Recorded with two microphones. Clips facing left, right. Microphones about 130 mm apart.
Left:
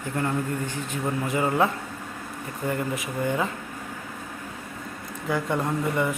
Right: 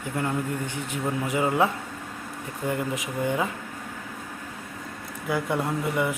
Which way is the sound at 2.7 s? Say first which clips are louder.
Even; 15° right (ahead or behind).